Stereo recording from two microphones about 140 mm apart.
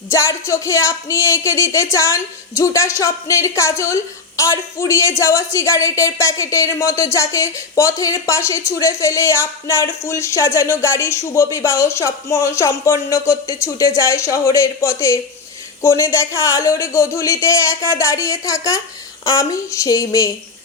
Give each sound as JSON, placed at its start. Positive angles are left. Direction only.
{"t": 0.1, "sound": "speech", "side_deg": 20}